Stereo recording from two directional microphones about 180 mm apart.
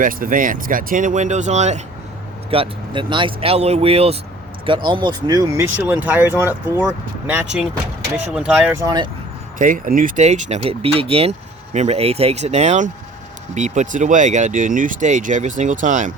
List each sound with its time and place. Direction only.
0.0 s speech: 50° right (ahead or behind)
2.5 s speech: 30° right (ahead or behind)
9.6 s speech: 50° right (ahead or behind)